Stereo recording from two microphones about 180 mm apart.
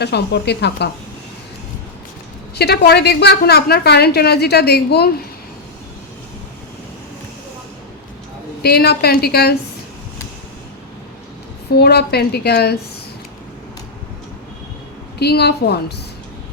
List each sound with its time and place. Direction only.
0.0 s speech: 65° left (ahead or behind)
2.6 s a woman's voice: 65° left (ahead or behind)
8.6 s a woman's voice: 60° left (ahead or behind)
11.7 s a woman's voice: 65° left (ahead or behind)
15.2 s a woman's voice: 65° left (ahead or behind)